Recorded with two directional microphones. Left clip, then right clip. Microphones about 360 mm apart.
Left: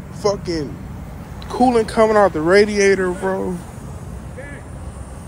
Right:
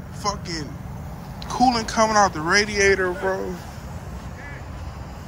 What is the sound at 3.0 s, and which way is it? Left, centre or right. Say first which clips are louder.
Speech: left 3 dB; left.